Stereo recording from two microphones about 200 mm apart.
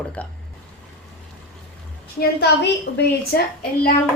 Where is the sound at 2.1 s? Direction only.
55° left (ahead or behind).